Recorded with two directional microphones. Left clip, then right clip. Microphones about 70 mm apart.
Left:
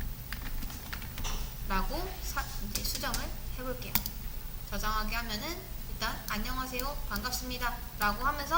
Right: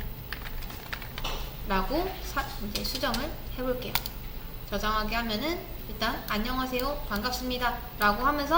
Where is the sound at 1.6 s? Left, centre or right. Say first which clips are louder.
Right 6 dB; left.